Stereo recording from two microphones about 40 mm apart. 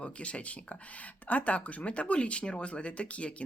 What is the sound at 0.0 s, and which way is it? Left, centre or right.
Speech, left.